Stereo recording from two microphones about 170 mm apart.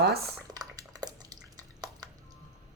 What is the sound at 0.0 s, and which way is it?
Speech, 70° right (ahead or behind).